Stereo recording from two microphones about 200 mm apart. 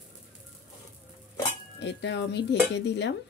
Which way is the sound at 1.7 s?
60° left (ahead or behind).